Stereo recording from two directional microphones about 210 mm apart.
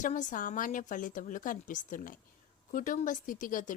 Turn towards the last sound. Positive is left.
turn(degrees=40)  # may be behind; listen again after turning